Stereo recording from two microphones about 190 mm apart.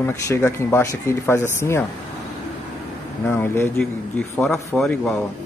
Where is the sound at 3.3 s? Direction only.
10° left (ahead or behind).